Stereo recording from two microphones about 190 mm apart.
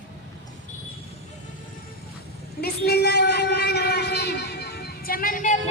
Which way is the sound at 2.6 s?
55° left (ahead or behind).